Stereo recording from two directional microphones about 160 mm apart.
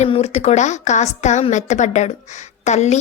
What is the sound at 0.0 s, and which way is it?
A woman's voice, 40° left (ahead or behind).